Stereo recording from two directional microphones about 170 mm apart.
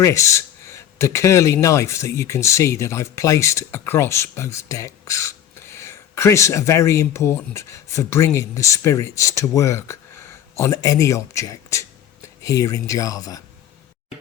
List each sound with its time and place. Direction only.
0.0 s speech: 15° left (ahead or behind)